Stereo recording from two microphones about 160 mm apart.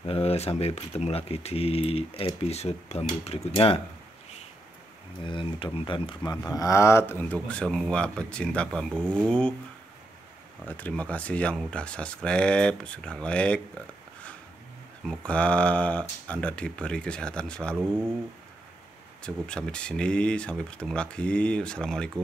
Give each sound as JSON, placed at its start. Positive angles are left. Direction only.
{"t": 0.0, "sound": "speech", "side_deg": 40}
{"t": 5.2, "sound": "speech", "side_deg": 30}
{"t": 8.9, "sound": "speech", "side_deg": -15}
{"t": 10.7, "sound": "speech", "side_deg": 10}
{"t": 15.0, "sound": "speech", "side_deg": 5}
{"t": 17.7, "sound": "speech", "side_deg": -15}
{"t": 19.2, "sound": "speech", "side_deg": 5}